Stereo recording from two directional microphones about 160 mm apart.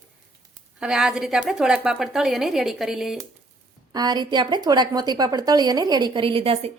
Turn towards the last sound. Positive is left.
turn(degrees=-35)  # may be behind; listen again after turning